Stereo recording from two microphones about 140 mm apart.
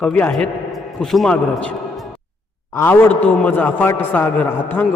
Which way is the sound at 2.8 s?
15° left (ahead or behind).